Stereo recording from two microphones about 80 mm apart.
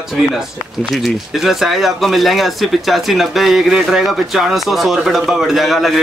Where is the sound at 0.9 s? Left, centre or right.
Centre.